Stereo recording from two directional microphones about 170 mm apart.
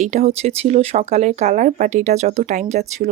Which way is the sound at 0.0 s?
40° right (ahead or behind).